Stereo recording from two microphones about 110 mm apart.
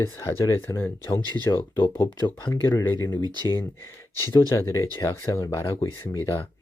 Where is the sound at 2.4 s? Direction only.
30° left (ahead or behind).